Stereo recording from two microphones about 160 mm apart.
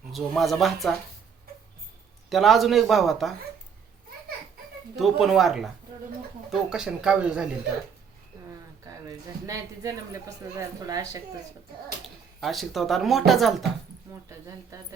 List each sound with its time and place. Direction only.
0.1 s speech: centre (ahead or behind)
2.3 s speech: centre (ahead or behind)
4.9 s speech: centre (ahead or behind)
8.8 s speech: 20° right (ahead or behind)
12.0 s speech: centre (ahead or behind)
14.3 s speech: 20° right (ahead or behind)